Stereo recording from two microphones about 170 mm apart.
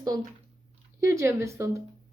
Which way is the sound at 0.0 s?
20° right (ahead or behind).